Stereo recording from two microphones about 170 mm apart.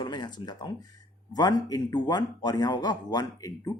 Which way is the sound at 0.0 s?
25° left (ahead or behind).